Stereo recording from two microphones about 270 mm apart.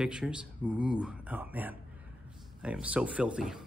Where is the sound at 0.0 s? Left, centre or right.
Centre.